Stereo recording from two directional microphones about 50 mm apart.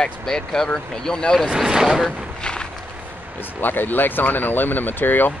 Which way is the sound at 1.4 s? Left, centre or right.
Centre.